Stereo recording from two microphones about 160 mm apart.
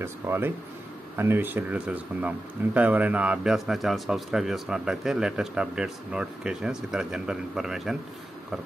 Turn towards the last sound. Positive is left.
turn(degrees=0)  # may be behind; listen again after turning